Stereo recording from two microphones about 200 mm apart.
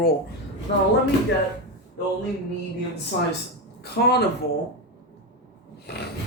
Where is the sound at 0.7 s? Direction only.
60° left (ahead or behind).